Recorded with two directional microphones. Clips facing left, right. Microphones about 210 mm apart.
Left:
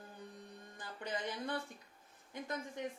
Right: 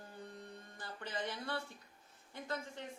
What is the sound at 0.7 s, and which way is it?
Speech, 15° left (ahead or behind).